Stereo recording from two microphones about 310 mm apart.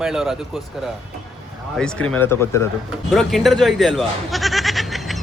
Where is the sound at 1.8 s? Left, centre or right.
Centre.